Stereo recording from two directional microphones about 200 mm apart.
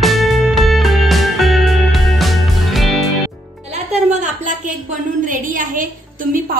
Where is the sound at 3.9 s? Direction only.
35° right (ahead or behind).